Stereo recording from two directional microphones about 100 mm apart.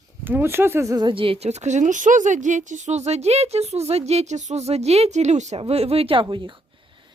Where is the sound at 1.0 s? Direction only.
55° right (ahead or behind); by 1.6 s 80° right.